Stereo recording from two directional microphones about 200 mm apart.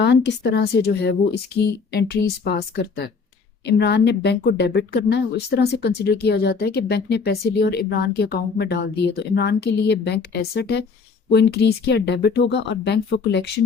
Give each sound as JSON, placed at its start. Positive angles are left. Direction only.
{"t": 0.0, "sound": "speech", "side_deg": 60}